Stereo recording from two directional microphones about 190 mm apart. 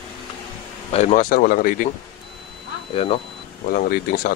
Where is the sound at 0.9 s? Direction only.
35° left (ahead or behind).